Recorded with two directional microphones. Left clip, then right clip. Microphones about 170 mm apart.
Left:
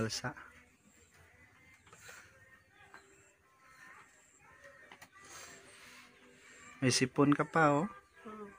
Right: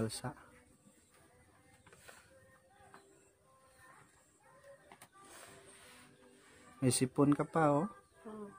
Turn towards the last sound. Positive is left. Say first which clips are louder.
# left 3 dB
turn(degrees=0)  # may be behind; listen again after turning